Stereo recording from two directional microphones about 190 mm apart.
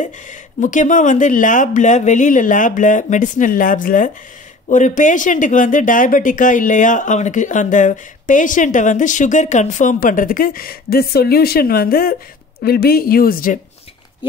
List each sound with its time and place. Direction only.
0.0 s speech: 40° left (ahead or behind)